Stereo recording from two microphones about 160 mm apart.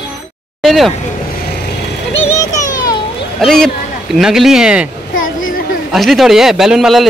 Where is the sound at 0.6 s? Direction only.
Centre (ahead or behind).